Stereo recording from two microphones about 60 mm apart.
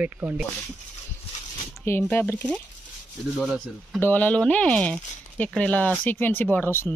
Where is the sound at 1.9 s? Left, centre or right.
Left.